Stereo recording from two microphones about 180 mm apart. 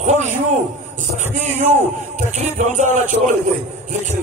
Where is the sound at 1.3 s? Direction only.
40° right (ahead or behind).